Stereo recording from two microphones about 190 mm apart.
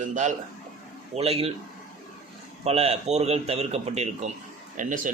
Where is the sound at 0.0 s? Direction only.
40° right (ahead or behind).